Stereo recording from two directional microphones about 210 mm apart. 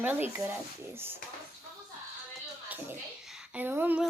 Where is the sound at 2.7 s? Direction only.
5° right (ahead or behind).